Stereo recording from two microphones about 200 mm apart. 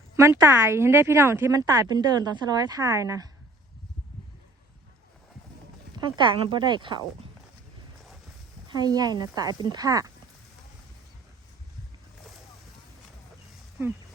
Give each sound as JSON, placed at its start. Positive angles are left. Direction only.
{"t": 0.2, "sound": "a woman's voice", "side_deg": -15}
{"t": 6.1, "sound": "speech", "side_deg": -25}
{"t": 8.6, "sound": "speech", "side_deg": -20}